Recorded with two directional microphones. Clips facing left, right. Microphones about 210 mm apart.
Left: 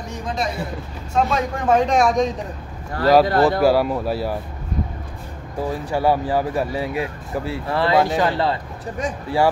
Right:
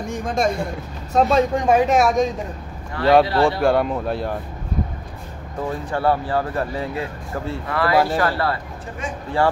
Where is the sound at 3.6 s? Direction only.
5° left (ahead or behind).